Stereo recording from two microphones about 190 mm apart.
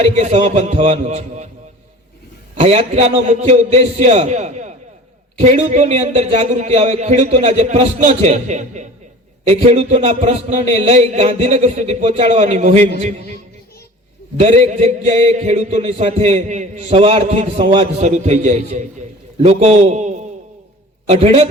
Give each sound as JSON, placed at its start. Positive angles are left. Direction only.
{"t": 0.0, "sound": "a man's voice", "side_deg": -35}
{"t": 2.6, "sound": "a man's voice", "side_deg": -30}
{"t": 14.3, "sound": "a man's voice", "side_deg": -35}